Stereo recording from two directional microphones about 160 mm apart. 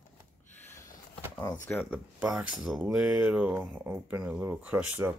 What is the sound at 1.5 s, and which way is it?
Speech, 5° left (ahead or behind).